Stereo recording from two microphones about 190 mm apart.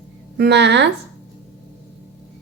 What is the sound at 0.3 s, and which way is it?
Speech, 65° right (ahead or behind).